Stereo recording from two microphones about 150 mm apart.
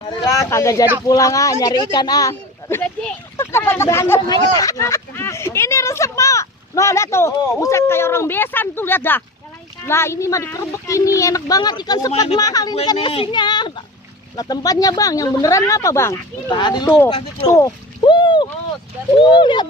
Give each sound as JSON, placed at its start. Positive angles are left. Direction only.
{"t": 0.3, "sound": "speech", "side_deg": 20}
{"t": 16.5, "sound": "speech", "side_deg": 30}
{"t": 17.4, "sound": "rowboat", "side_deg": 20}
{"t": 19.2, "sound": "speech", "side_deg": 30}